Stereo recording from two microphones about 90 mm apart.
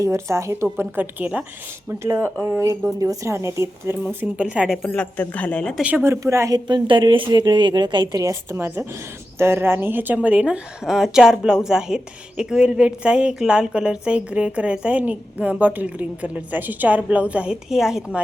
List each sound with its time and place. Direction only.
0.0 s a woman's voice: 35° right (ahead or behind); by 1.5 s 15° right (ahead or behind)
1.9 s a woman's voice: 30° right (ahead or behind)
4.0 s a woman's voice: 20° right (ahead or behind)
4.4 s a woman's voice: 10° right (ahead or behind)
4.8 s a woman's voice: 15° left (ahead or behind)
6.0 s a woman's voice: 30° right (ahead or behind)
6.5 s a woman's voice: 60° right (ahead or behind)
8.2 s a woman's voice: 35° right (ahead or behind); by 18.2 s 5° right (ahead or behind)